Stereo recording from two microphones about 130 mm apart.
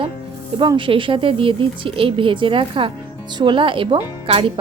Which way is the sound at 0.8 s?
40° right (ahead or behind).